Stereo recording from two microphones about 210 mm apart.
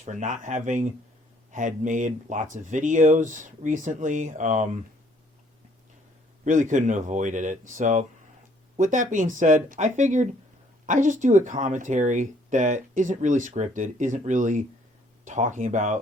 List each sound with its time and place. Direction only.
0.0 s speech: 35° right (ahead or behind)
6.4 s speech: 35° right (ahead or behind)